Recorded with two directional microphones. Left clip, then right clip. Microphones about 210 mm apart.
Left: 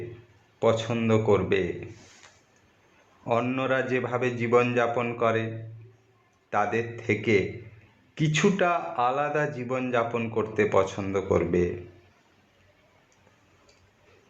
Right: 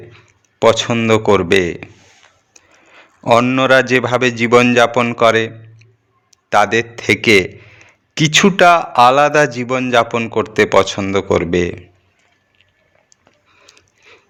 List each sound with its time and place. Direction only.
0.6 s a man's voice: 45° right (ahead or behind)
3.6 s a man's voice: 50° right (ahead or behind)
4.2 s a man's voice: 40° right (ahead or behind)
6.5 s a man's voice: 55° right (ahead or behind)
8.1 s a man's voice: 40° right (ahead or behind)
9.6 s a man's voice: 40° right (ahead or behind)